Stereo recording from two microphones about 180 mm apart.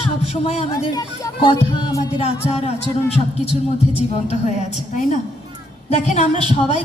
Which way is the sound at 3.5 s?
30° right (ahead or behind).